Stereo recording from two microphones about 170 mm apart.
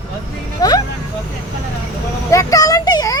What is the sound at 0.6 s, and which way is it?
Vehicle, 20° left (ahead or behind).